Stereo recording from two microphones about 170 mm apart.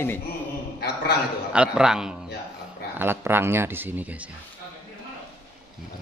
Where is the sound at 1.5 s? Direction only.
5° right (ahead or behind).